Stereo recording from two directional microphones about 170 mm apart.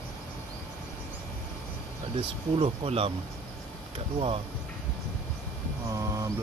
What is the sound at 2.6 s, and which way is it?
Speech, 35° right (ahead or behind).